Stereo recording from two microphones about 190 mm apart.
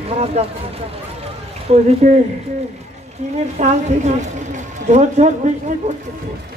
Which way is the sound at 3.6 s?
40° right (ahead or behind).